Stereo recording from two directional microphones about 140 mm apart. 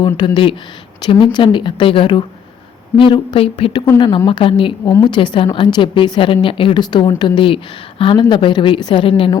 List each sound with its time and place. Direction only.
0.0 s a woman's voice: 35° left (ahead or behind)